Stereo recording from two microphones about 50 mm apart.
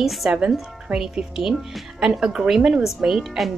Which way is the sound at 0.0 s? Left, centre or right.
Centre.